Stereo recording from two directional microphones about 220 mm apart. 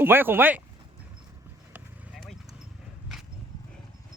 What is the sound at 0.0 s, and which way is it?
Speech, 10° right (ahead or behind).